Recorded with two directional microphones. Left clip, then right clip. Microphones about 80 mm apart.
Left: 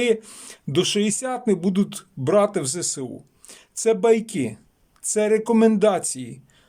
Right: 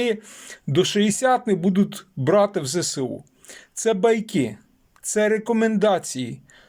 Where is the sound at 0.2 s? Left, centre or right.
Left.